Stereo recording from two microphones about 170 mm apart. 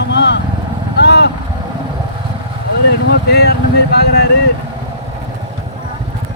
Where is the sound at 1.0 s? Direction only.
80° left.